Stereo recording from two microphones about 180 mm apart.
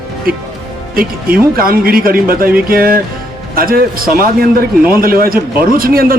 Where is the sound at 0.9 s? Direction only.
55° right (ahead or behind).